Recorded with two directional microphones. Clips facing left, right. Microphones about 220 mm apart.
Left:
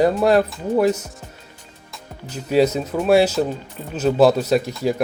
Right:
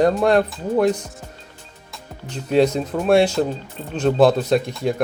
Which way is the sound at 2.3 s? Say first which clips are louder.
Even; 5° left (ahead or behind).